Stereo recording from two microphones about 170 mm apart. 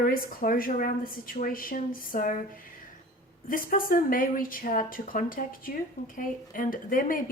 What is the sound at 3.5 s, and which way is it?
Speech, 55° left (ahead or behind).